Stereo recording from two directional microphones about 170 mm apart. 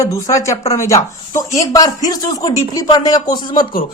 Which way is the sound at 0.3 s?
20° left (ahead or behind).